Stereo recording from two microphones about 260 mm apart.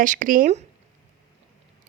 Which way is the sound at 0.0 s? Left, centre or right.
Right.